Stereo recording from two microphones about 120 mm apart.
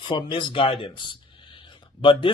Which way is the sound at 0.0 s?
45° left (ahead or behind).